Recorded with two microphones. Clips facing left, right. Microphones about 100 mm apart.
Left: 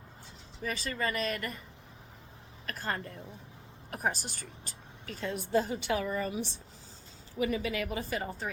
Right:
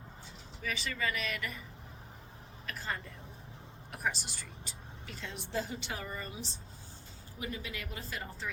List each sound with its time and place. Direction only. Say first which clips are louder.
0.6 s speech: left 3 dB; 40° left (ahead or behind)
2.6 s a woman's voice: left 4 dB; 50° left (ahead or behind); by 8.4 s 65° left (ahead or behind)